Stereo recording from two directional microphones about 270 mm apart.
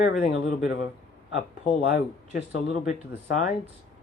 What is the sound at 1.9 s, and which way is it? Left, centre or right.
Speech, left.